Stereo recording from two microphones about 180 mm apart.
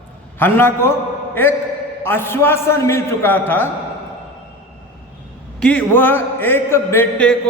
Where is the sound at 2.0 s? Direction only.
10° left (ahead or behind).